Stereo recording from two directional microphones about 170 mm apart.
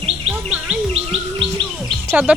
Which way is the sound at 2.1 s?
10° right (ahead or behind).